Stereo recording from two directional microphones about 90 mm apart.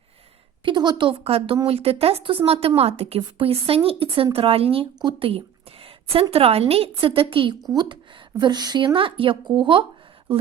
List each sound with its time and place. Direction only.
0.6 s a woman's voice: 55° right (ahead or behind); by 4.9 s 90° right
5.8 s a sound: 90° right
6.3 s a woman's voice: 90° right
7.7 s speech: 50° right (ahead or behind); by 9.8 s 65° right (ahead or behind)